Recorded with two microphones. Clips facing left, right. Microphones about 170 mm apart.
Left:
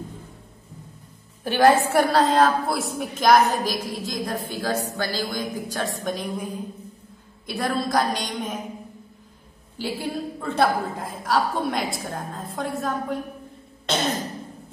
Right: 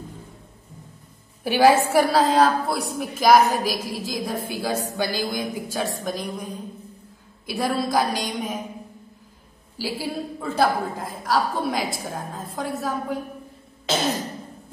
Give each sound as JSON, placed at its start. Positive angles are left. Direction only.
{"t": 1.4, "sound": "a woman's voice", "side_deg": -10}
{"t": 6.0, "sound": "a woman's voice", "side_deg": 0}
{"t": 7.4, "sound": "a woman's voice", "side_deg": -5}
{"t": 9.8, "sound": "a woman's voice", "side_deg": -5}
{"t": 13.8, "sound": "throat clearing", "side_deg": -5}